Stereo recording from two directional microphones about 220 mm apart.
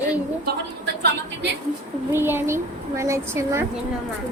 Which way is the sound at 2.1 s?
10° right (ahead or behind).